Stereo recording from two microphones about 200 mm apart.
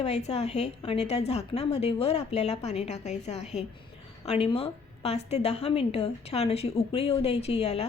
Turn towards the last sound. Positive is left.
turn(degrees=30)  # may be behind; listen again after turning